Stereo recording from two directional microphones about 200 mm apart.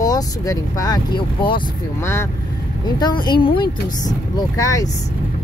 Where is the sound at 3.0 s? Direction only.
20° left (ahead or behind).